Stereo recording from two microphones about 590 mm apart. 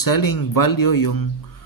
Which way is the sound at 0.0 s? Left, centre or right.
Left.